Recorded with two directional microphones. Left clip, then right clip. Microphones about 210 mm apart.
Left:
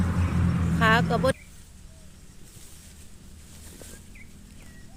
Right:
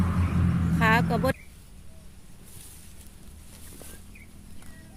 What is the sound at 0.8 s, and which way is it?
Vehicle, 10° right (ahead or behind).